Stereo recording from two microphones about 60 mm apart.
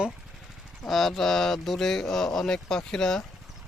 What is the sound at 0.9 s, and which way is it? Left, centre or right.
Speech, centre.